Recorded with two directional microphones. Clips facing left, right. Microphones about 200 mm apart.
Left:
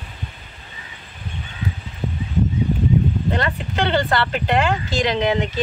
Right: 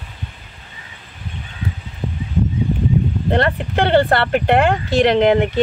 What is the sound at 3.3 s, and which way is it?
Speech, 55° right (ahead or behind).